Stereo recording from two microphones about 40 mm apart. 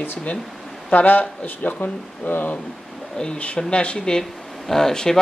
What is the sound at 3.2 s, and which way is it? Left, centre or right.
Speech, left.